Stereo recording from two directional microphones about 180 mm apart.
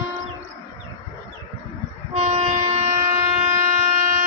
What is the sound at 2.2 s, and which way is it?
Train, 40° right (ahead or behind).